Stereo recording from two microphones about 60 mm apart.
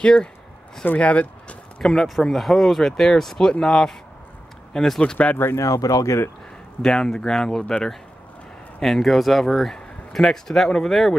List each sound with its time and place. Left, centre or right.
0.0 s speech: centre
1.8 s speech: centre
5.1 s speech: left
5.6 s speech: left
6.8 s speech: centre